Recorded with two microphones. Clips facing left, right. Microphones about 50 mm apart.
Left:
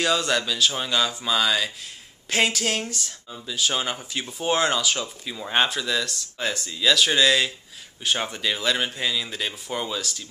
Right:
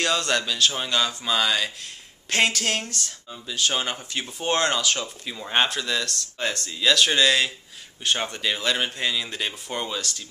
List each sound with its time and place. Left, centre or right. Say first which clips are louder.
0.0 s speech: left 1 dB; centre